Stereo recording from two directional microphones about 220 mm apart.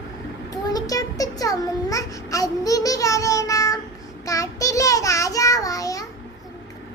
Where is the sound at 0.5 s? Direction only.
15° left (ahead or behind).